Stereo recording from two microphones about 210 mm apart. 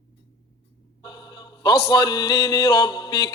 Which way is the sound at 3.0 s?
15° left (ahead or behind).